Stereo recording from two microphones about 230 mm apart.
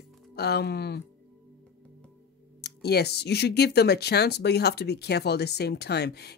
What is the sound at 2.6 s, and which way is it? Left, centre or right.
Speech, left.